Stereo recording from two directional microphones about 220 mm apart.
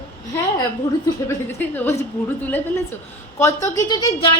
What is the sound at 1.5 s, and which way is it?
Speech, 10° left (ahead or behind).